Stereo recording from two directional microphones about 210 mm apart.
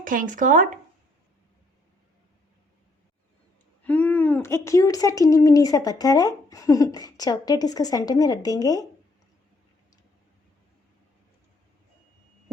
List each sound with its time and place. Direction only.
0.0 s speech: 40° right (ahead or behind)
3.8 s speech: 5° left (ahead or behind)